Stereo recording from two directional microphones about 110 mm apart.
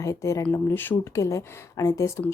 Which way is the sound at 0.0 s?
30° left (ahead or behind).